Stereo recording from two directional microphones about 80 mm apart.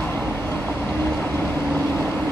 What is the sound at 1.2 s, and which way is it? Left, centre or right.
Vehicle, left.